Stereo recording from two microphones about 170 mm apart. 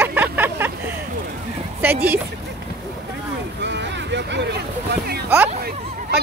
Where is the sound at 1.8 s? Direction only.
10° right (ahead or behind).